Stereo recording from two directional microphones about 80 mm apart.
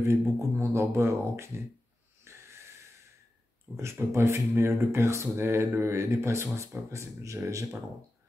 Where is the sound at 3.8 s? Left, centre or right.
Right.